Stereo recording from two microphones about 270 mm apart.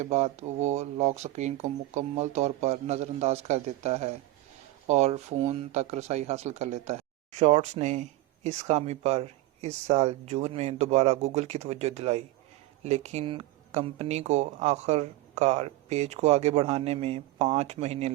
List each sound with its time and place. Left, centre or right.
0.0 s speech: right